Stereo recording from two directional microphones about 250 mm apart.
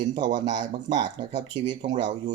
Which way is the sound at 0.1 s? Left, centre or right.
Centre.